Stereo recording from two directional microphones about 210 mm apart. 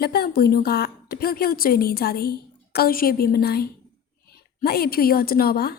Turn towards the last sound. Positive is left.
turn(degrees=45)  # may be behind; listen again after turning